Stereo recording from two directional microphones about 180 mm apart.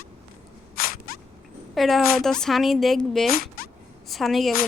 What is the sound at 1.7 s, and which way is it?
Speech, centre (ahead or behind).